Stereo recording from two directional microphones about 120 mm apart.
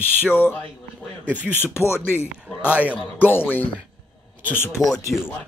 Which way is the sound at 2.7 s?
10° right (ahead or behind).